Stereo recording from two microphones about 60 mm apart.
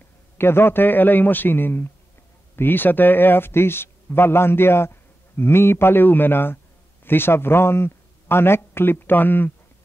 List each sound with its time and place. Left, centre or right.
0.4 s speech: left